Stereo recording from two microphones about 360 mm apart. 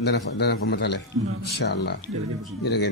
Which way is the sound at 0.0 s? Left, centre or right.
Left.